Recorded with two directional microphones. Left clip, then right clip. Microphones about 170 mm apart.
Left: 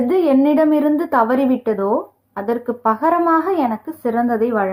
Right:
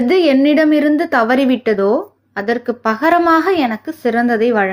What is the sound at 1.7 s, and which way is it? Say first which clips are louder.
Speech: right 7 dB; 45° right (ahead or behind).